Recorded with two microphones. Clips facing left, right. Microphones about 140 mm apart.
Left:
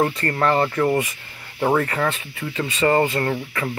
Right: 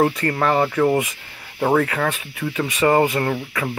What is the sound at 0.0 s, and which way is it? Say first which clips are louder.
Speech: right 2 dB; 5° right (ahead or behind).